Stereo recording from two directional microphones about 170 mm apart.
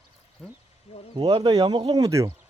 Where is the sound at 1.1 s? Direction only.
25° right (ahead or behind).